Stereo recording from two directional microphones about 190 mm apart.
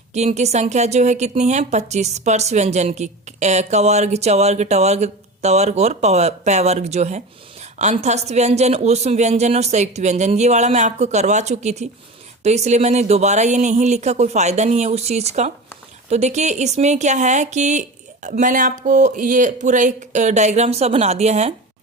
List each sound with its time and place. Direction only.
0.1 s speech: 35° right (ahead or behind)